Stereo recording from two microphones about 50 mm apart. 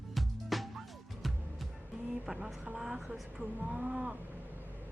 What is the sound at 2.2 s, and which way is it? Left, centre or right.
Speech, centre.